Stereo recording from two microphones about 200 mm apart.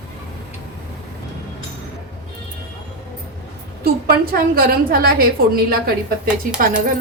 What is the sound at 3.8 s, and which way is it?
A woman's voice, 45° right (ahead or behind).